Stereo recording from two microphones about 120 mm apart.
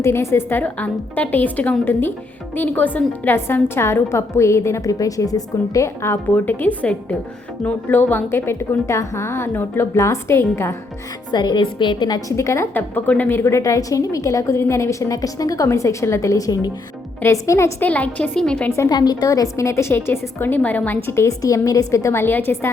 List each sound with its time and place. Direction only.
0.0 s a woman's voice: 20° left (ahead or behind)
11.3 s a woman's voice: 35° left (ahead or behind)
17.8 s a woman's voice: 10° left (ahead or behind)
18.7 s a woman's voice: 30° left (ahead or behind)